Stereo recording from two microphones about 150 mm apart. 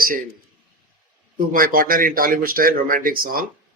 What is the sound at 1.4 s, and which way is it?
A man's voice, 70° right (ahead or behind).